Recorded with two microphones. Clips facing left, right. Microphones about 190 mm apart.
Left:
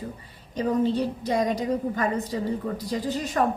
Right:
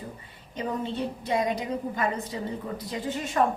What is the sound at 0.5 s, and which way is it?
A woman's voice, 40° left (ahead or behind).